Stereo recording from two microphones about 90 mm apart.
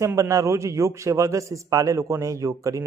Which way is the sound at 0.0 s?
35° right (ahead or behind).